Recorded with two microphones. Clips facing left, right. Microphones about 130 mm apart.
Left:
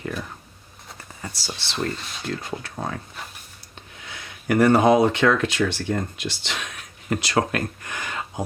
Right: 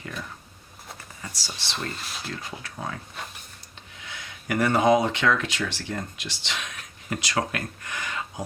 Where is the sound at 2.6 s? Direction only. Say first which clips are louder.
Left 4 dB; 40° left (ahead or behind).